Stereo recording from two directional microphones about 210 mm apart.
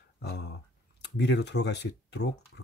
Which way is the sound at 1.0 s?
55° left (ahead or behind).